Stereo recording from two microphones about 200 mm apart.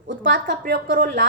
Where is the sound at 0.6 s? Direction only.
60° right (ahead or behind).